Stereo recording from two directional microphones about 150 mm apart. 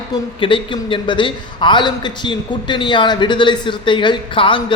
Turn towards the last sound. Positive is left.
turn(degrees=35)  # may be behind; listen again after turning